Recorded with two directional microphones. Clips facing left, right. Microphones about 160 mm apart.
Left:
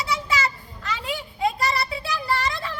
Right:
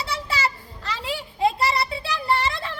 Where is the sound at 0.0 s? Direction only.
35° right (ahead or behind).